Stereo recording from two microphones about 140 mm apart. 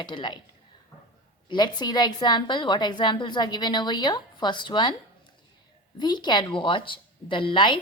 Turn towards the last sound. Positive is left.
turn(degrees=35)  # may be behind; listen again after turning